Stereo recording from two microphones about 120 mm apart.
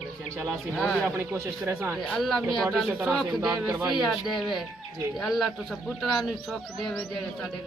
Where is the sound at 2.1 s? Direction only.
Centre (ahead or behind).